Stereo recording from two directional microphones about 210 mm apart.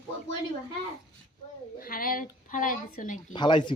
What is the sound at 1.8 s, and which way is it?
A woman's voice, 45° left (ahead or behind).